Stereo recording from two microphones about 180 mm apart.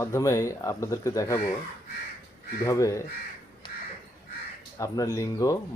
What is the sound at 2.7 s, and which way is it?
Speech, 15° left (ahead or behind).